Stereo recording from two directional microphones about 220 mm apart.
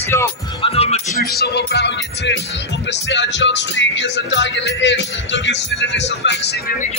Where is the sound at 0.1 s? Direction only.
10° left (ahead or behind).